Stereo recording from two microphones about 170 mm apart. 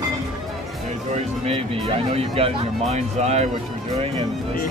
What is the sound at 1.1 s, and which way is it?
Speech, 35° right (ahead or behind).